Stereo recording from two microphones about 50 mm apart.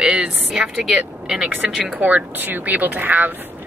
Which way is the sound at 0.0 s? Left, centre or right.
Centre.